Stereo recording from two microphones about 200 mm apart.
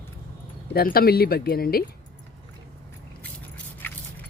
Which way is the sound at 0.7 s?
50° left (ahead or behind).